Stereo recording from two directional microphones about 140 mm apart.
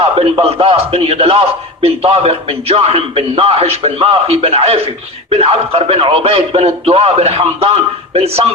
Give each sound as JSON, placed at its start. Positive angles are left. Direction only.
{"t": 0.0, "sound": "a man's voice", "side_deg": -45}